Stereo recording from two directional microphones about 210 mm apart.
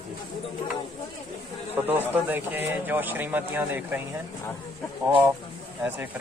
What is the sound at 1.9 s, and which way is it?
Speech, 10° right (ahead or behind).